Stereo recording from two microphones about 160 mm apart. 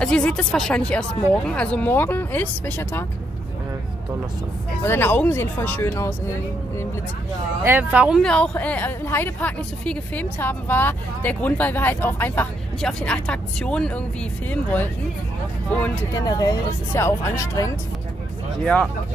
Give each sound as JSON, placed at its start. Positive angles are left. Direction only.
{"t": 0.0, "sound": "a woman's voice", "side_deg": 5}
{"t": 4.8, "sound": "a woman's voice", "side_deg": 15}
{"t": 7.6, "sound": "speech", "side_deg": -10}
{"t": 8.2, "sound": "a woman's voice", "side_deg": 5}
{"t": 16.1, "sound": "a woman's voice", "side_deg": 25}